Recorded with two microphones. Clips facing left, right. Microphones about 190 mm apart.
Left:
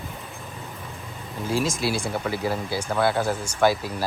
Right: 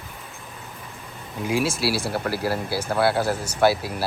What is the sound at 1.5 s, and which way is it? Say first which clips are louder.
Speech: right 1 dB; 10° right (ahead or behind).